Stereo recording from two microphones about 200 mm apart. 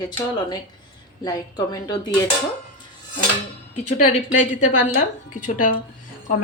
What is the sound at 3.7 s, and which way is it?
A woman's voice, 40° left (ahead or behind).